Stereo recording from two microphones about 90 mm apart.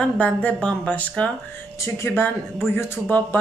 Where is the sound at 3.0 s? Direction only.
15° left (ahead or behind).